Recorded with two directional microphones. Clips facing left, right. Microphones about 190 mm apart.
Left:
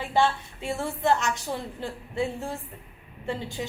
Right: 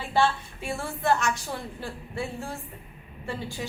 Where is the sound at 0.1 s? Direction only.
20° left (ahead or behind).